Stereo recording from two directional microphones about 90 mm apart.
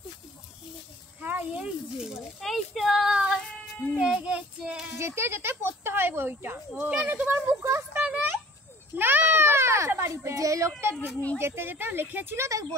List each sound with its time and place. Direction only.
1.2 s speech: 15° right (ahead or behind)
2.4 s speech: centre (ahead or behind)
4.9 s speech: 30° right (ahead or behind)
7.6 s speech: 30° right (ahead or behind)
8.0 s a sound: 15° right (ahead or behind)
8.9 s a child's voice: 20° right (ahead or behind)
12.4 s speech: 40° right (ahead or behind)